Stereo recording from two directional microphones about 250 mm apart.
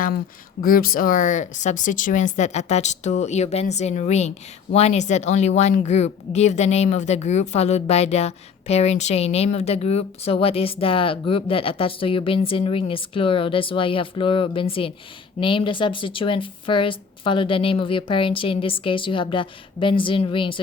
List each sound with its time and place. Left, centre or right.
0.6 s speech: left; by 20.6 s centre